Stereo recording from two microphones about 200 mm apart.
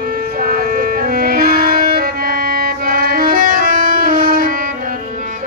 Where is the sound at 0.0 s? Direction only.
45° right (ahead or behind).